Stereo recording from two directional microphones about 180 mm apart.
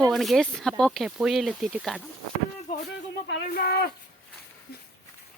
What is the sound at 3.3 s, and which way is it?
Speech, 65° left (ahead or behind).